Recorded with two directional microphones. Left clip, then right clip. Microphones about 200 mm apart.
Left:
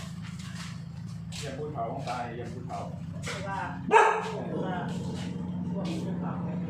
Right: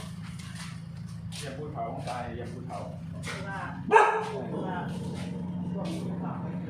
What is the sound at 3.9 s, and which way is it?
Dog, centre (ahead or behind).